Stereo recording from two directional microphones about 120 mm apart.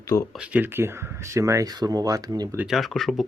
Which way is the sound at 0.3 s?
10° right (ahead or behind).